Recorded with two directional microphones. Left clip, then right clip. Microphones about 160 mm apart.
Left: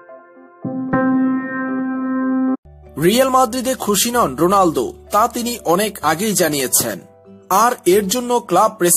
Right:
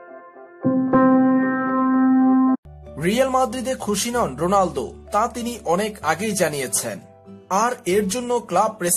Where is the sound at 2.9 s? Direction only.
30° left (ahead or behind).